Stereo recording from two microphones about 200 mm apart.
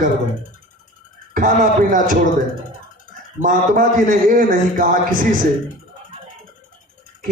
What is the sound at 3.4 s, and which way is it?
Speech, 40° right (ahead or behind).